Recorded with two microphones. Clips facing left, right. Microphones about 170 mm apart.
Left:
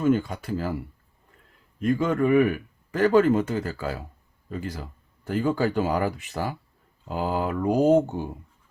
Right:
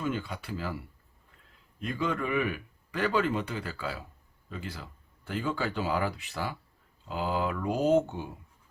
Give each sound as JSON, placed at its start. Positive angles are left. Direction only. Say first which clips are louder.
{"t": 0.0, "sound": "speech", "louder": "left 10 dB", "side_deg": 45}
{"t": 1.8, "sound": "speech", "louder": "left 9 dB", "side_deg": 45}